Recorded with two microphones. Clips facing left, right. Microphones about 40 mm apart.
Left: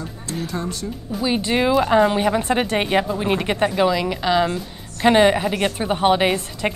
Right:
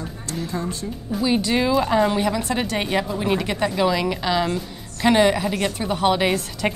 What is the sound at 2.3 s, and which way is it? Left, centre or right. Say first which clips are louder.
A woman's voice: left 4 dB; left.